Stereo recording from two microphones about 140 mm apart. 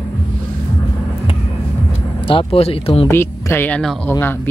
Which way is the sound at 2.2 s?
40° left (ahead or behind).